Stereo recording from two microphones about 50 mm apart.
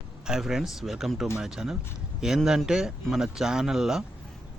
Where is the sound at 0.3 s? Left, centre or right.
Centre.